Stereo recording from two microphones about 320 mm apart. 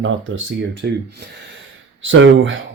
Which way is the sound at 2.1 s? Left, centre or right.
Right.